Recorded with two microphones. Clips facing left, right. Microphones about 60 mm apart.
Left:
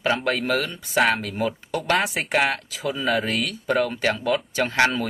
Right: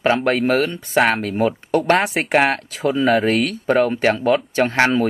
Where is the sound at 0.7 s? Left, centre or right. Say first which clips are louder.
Right 4 dB; centre.